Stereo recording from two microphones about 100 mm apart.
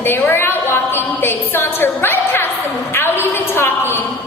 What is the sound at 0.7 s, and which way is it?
A woman's voice, 20° left (ahead or behind).